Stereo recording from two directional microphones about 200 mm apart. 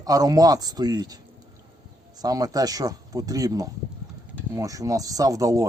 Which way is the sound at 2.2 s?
20° right (ahead or behind).